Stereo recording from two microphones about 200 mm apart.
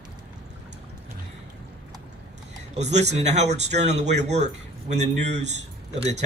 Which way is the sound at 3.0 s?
35° right (ahead or behind).